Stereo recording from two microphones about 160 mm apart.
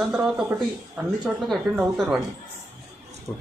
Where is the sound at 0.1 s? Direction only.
5° right (ahead or behind).